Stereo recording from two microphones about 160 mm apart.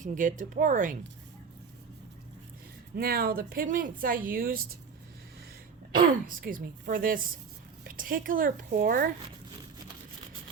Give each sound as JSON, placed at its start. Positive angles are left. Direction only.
{"t": 0.0, "sound": "speech", "side_deg": -55}
{"t": 2.9, "sound": "speech", "side_deg": -70}
{"t": 6.0, "sound": "speech", "side_deg": -60}